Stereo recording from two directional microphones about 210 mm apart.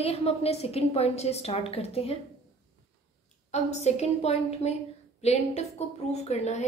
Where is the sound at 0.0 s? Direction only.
30° left (ahead or behind).